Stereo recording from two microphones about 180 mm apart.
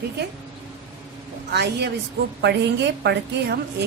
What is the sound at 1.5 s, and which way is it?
A woman's voice, 70° right (ahead or behind).